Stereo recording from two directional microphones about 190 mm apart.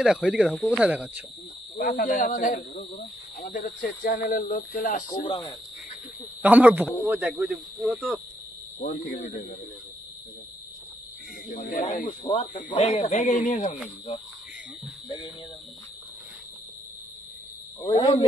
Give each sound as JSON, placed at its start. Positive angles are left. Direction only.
{"t": 0.0, "sound": "speech", "side_deg": 0}
{"t": 1.8, "sound": "speech", "side_deg": 45}
{"t": 6.4, "sound": "speech", "side_deg": -10}
{"t": 8.7, "sound": "speech", "side_deg": 50}
{"t": 11.4, "sound": "speech", "side_deg": 40}